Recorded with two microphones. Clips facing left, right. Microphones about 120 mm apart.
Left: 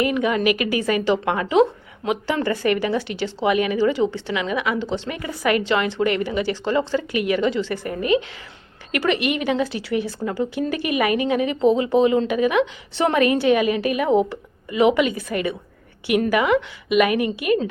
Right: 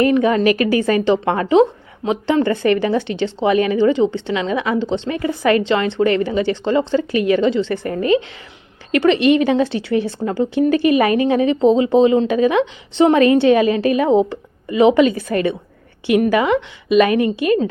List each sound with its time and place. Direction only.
0.0 s a woman's voice: 35° right (ahead or behind)
8.9 s speech: 25° right (ahead or behind)